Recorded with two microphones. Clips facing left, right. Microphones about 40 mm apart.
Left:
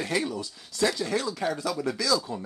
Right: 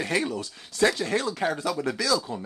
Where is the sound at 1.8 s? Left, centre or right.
Right.